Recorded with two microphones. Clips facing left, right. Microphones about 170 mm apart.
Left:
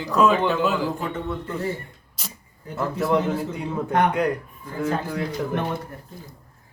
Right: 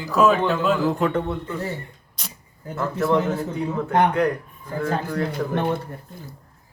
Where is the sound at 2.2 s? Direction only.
5° left (ahead or behind).